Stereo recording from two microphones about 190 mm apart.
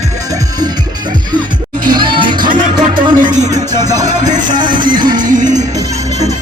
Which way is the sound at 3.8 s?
20° right (ahead or behind).